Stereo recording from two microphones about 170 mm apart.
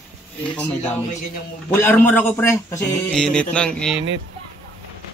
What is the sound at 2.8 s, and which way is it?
Music, 5° left (ahead or behind).